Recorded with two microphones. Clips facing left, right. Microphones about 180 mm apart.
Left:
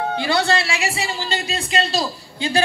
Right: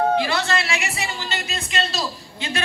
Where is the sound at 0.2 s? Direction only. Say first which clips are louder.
Left 3 dB; 30° left (ahead or behind).